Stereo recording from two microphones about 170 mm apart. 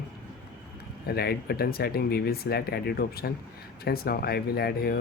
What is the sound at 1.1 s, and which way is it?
Speech, 65° left (ahead or behind).